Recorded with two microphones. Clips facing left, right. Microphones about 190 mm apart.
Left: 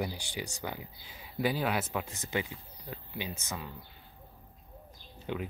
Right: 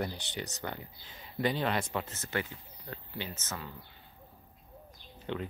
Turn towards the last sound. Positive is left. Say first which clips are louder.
# even
turn(degrees=10)  # may be behind; listen again after turning